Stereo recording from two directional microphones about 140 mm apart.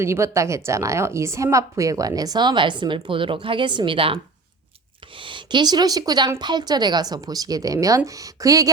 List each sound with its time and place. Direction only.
0.0 s a woman's voice: 20° right (ahead or behind); by 4.2 s 40° right (ahead or behind)
5.2 s a woman's voice: 35° right (ahead or behind)